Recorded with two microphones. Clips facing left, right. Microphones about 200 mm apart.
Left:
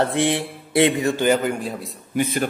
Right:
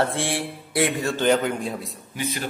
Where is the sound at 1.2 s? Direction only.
5° left (ahead or behind).